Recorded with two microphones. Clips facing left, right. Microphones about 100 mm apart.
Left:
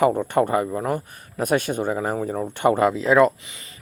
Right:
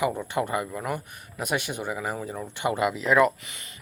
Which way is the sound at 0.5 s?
30° left (ahead or behind).